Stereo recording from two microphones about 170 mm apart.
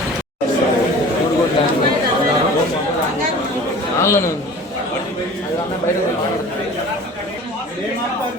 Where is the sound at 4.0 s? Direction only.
15° left (ahead or behind).